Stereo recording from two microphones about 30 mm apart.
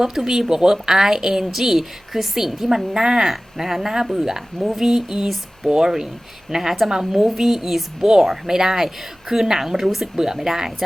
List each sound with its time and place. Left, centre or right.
0.0 s a woman's voice: centre
5.6 s speech: right
6.6 s a woman's voice: centre